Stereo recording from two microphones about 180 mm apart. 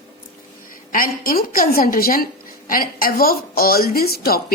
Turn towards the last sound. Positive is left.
turn(degrees=55)  # may be behind; listen again after turning